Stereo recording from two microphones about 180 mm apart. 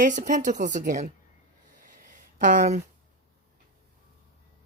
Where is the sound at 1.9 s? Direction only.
45° right (ahead or behind).